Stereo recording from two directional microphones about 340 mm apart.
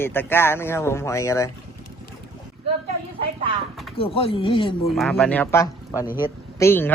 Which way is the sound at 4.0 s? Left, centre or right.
Centre.